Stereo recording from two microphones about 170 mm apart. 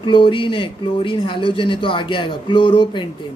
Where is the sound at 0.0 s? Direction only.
30° left (ahead or behind).